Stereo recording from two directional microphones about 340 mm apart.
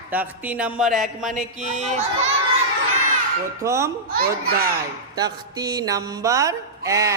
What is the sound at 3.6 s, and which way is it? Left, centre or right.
Speech, centre.